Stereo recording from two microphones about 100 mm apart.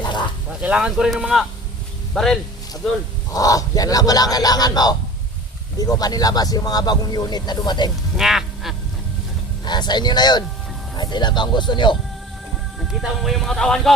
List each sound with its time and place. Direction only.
0.0 s a sound: 50° left (ahead or behind)
0.6 s speech: 10° right (ahead or behind)
3.3 s speech: 35° left (ahead or behind)
8.1 s a sound: 5° right (ahead or behind)
9.6 s speech: 45° left (ahead or behind)
12.8 s speech: centre (ahead or behind)